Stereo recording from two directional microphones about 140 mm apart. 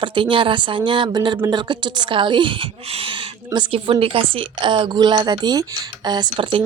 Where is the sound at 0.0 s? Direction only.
35° right (ahead or behind).